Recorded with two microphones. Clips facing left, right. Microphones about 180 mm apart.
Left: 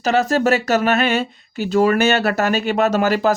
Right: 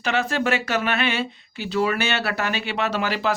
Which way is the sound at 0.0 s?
40° left (ahead or behind).